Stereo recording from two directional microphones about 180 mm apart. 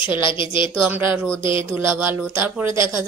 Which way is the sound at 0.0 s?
25° left (ahead or behind).